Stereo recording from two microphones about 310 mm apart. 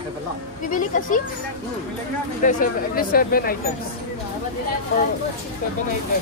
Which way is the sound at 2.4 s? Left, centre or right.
Left.